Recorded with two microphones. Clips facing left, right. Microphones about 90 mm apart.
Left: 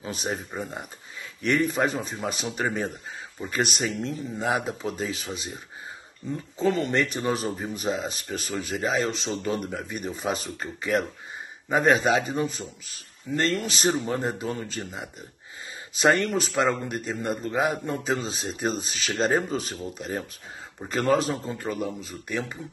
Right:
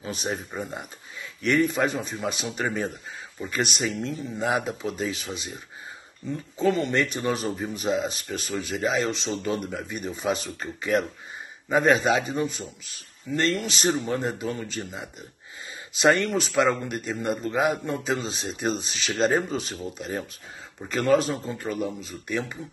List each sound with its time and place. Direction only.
0.3 s speech: 15° left (ahead or behind)
1.4 s a man's voice: 35° left (ahead or behind)
6.6 s a man's voice: 35° left (ahead or behind)